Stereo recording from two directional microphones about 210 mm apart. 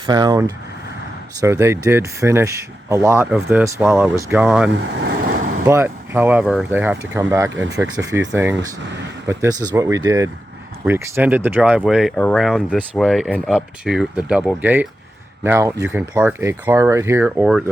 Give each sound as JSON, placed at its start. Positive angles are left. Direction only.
{"t": 0.0, "sound": "speech", "side_deg": -20}